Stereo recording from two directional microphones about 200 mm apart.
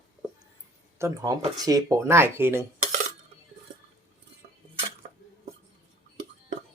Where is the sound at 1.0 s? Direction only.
15° right (ahead or behind).